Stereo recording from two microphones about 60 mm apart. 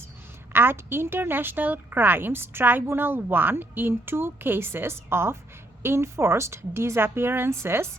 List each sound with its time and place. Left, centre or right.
0.5 s a woman's voice: right